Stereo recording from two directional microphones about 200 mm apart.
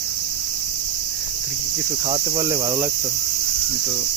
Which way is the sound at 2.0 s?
25° right (ahead or behind).